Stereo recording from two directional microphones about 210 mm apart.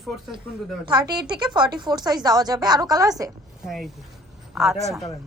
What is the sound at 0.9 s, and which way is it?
A woman's voice, 20° right (ahead or behind).